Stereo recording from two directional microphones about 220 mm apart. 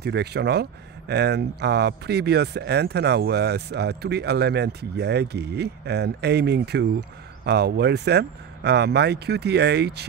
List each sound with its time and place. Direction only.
0.0 s speech: 50° right (ahead or behind)